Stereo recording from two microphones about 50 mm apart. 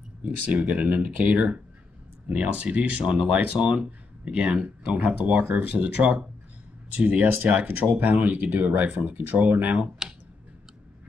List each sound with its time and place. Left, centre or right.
0.2 s speech: right
10.0 s clicking: centre